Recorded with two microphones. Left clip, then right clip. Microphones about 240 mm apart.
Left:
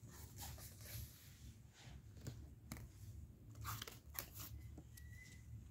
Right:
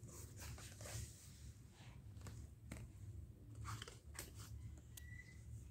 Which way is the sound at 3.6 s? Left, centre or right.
Left.